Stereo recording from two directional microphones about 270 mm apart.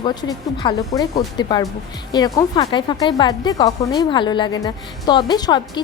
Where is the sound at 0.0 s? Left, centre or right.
Centre.